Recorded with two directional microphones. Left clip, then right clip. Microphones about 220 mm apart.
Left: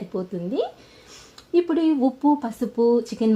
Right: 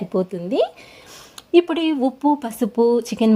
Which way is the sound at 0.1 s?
25° right (ahead or behind).